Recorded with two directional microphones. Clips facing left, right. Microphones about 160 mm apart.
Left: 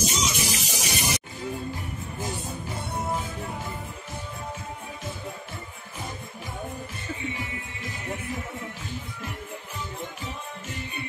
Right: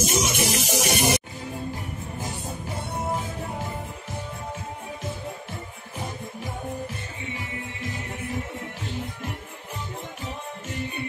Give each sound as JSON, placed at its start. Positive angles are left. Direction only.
{"t": 0.0, "sound": "music", "side_deg": -55}